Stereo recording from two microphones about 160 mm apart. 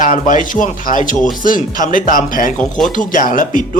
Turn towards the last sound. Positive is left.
turn(degrees=55)  # may be behind; listen again after turning